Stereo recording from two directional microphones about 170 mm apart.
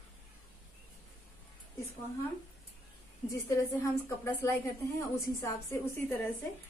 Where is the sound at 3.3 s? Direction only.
15° left (ahead or behind).